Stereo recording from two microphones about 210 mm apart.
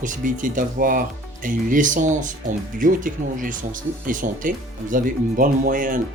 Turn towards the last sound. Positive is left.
turn(degrees=-40)  # may be behind; listen again after turning